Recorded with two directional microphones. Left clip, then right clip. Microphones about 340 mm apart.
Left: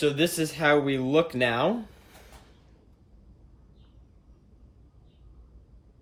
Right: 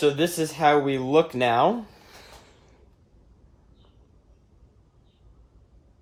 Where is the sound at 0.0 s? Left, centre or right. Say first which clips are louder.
Right 3 dB; centre.